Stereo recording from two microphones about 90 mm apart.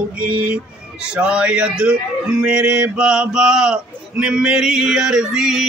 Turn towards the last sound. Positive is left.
turn(degrees=-5)  # may be behind; listen again after turning